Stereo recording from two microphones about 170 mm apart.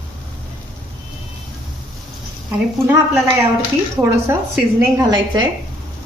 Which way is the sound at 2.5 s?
10° right (ahead or behind).